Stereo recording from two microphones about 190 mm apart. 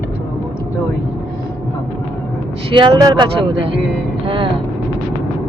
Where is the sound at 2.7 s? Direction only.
20° right (ahead or behind).